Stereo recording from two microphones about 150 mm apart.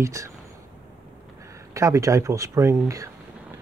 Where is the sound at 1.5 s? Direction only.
20° right (ahead or behind).